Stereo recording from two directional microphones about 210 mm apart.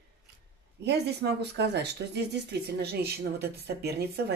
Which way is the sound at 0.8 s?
55° right (ahead or behind).